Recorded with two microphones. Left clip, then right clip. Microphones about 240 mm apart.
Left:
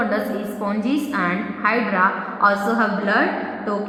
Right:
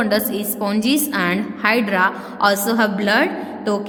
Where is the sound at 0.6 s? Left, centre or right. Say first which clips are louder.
Right 4 dB; right.